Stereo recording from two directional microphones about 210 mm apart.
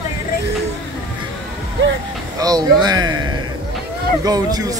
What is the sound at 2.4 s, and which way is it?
Speech, 20° right (ahead or behind).